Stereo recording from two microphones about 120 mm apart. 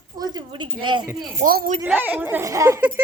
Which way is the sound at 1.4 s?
90° right.